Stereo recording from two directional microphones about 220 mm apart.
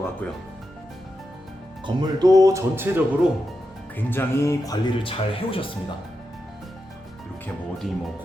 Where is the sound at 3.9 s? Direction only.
10° left (ahead or behind).